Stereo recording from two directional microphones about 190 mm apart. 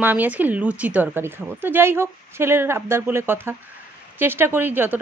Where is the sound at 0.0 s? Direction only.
10° right (ahead or behind).